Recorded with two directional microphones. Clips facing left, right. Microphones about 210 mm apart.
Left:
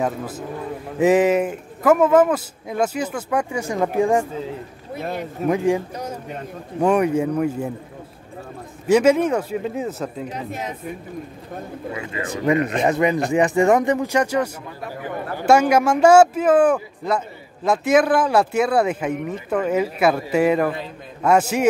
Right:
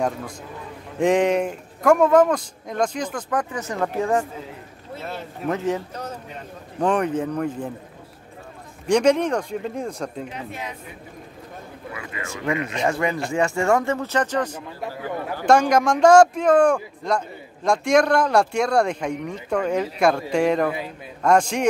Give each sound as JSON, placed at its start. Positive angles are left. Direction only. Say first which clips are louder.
{"t": 0.0, "sound": "a man's voice", "louder": "left 2 dB", "side_deg": 5}
{"t": 8.8, "sound": "speech", "louder": "left 2 dB", "side_deg": 5}
{"t": 10.3, "sound": "speech", "louder": "left 4 dB", "side_deg": 40}
{"t": 11.9, "sound": "speech", "louder": "left 5 dB", "side_deg": 25}
{"t": 12.5, "sound": "speech", "louder": "left 6 dB", "side_deg": 50}
{"t": 12.8, "sound": "a man's voice", "louder": "left 4 dB", "side_deg": 20}